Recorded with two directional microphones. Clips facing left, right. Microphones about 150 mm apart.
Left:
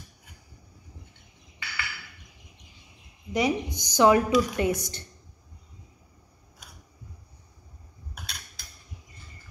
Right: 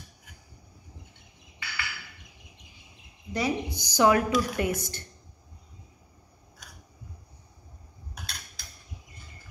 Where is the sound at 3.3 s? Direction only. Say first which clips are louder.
Left 3 dB; 20° left (ahead or behind).